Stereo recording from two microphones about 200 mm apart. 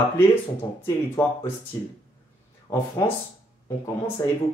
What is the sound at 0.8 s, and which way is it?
Speech, 15° left (ahead or behind).